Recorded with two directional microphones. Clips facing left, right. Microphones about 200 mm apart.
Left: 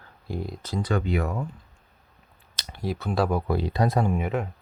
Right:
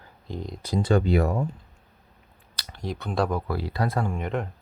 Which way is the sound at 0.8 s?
35° right (ahead or behind).